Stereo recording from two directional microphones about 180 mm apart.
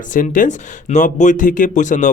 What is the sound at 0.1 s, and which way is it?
Speech, 45° left (ahead or behind).